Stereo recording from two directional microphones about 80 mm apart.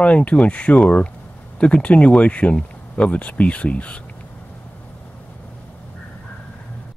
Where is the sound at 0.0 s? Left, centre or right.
Centre.